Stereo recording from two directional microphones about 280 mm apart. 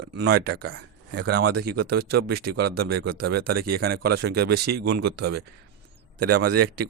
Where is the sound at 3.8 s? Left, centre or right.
Right.